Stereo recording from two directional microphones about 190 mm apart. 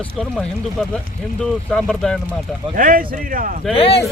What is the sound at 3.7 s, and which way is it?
Speech, 30° left (ahead or behind).